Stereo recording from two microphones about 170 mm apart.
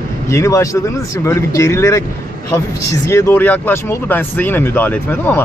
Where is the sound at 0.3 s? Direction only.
20° left (ahead or behind).